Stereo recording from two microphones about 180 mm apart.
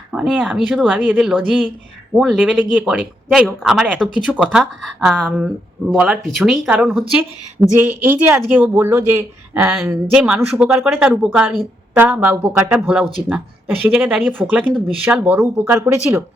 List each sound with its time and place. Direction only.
0.1 s speech: 5° right (ahead or behind)